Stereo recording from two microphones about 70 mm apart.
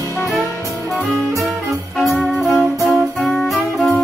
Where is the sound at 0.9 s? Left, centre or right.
Centre.